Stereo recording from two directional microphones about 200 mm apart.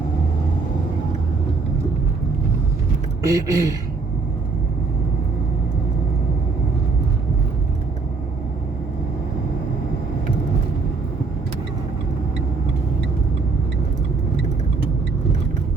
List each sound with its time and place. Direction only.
3.2 s speech: 15° right (ahead or behind)